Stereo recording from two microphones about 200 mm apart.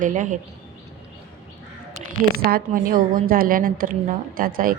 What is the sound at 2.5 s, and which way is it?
A woman's voice, 45° right (ahead or behind).